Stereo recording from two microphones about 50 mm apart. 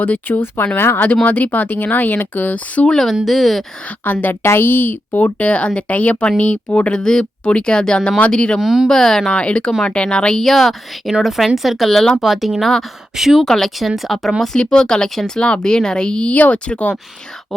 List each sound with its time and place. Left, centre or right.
0.0 s a woman's voice: left
1.0 s speech: left
3.2 s a woman's voice: centre
3.8 s speech: left
4.4 s a woman's voice: left
5.2 s speech: left
7.0 s speech: centre
8.6 s a woman's voice: centre
8.9 s speech: centre
10.4 s a woman's voice: centre
12.2 s a woman's voice: centre
13.4 s a woman's voice: centre
14.5 s speech: centre
16.3 s speech: left